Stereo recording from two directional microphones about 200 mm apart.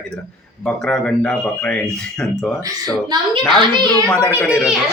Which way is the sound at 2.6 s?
20° right (ahead or behind).